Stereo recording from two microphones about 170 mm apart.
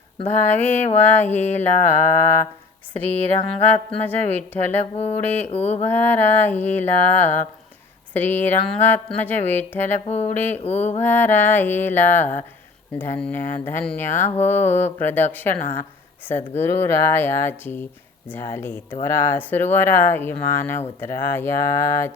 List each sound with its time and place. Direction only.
0.3 s speech: 10° left (ahead or behind)
5.5 s mantra: 40° left (ahead or behind)
5.8 s speech: 10° left (ahead or behind)
10.1 s mantra: 40° left (ahead or behind)
10.3 s speech: 10° left (ahead or behind)
10.6 s mantra: 40° left (ahead or behind)
11.0 s speech: 10° left (ahead or behind)